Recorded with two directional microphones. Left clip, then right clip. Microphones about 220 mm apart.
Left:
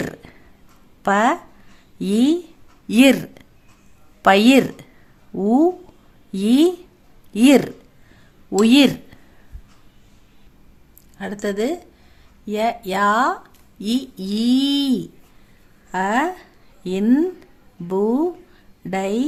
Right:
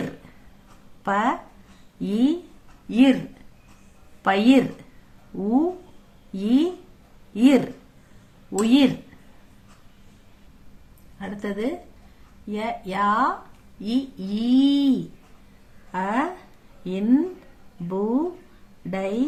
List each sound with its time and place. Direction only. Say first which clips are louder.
1.0 s speech: left 6 dB; 50° left (ahead or behind)
4.2 s speech: left 6 dB; 50° left (ahead or behind)
6.3 s speech: left 6 dB; 50° left (ahead or behind)
11.2 s speech: left 6 dB; 45° left (ahead or behind)